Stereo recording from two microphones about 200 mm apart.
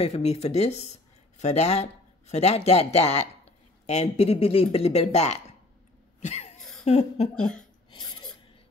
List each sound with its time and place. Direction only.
0.0 s speech: 30° left (ahead or behind)
6.2 s cough: 35° left (ahead or behind)
6.8 s speech: 30° left (ahead or behind)
7.3 s speech: 5° left (ahead or behind)
7.9 s a sound: 20° left (ahead or behind)